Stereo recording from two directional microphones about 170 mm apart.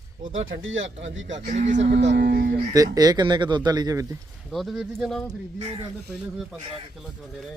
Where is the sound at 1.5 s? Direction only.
45° right (ahead or behind).